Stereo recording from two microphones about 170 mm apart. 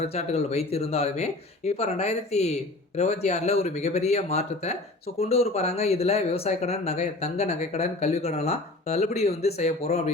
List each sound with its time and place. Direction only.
0.0 s speech: 40° left (ahead or behind)